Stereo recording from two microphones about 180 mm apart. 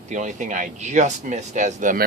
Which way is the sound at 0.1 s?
45° right (ahead or behind).